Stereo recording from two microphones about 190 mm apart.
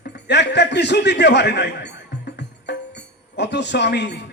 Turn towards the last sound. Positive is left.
turn(degrees=60)  # may be behind; listen again after turning